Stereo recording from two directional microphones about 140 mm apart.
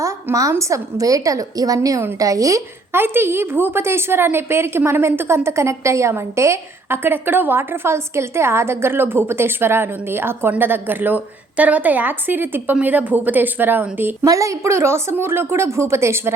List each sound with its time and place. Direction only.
0.0 s a woman's voice: 25° right (ahead or behind)